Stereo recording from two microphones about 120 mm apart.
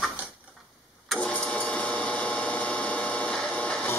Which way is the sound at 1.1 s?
10° left (ahead or behind).